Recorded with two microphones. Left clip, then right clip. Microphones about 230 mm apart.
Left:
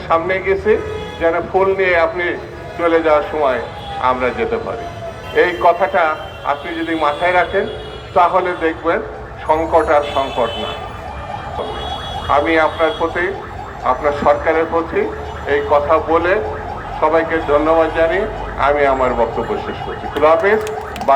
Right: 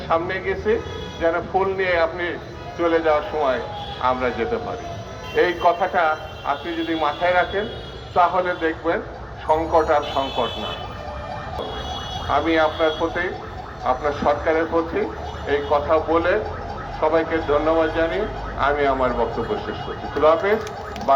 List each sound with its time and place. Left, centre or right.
0.1 s a man's voice: left
12.3 s a man's voice: left